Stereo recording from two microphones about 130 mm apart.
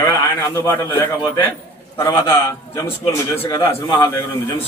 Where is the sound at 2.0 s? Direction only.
20° left (ahead or behind).